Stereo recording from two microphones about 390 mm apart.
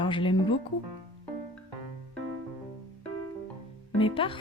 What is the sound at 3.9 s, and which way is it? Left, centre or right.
Speech, centre.